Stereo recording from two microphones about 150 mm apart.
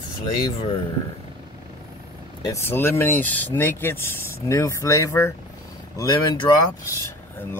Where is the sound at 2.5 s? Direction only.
15° left (ahead or behind).